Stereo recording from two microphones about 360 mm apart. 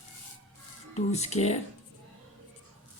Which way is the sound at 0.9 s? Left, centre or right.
Centre.